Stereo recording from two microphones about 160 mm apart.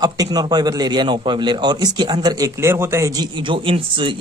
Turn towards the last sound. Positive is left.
turn(degrees=-30)  # may be behind; listen again after turning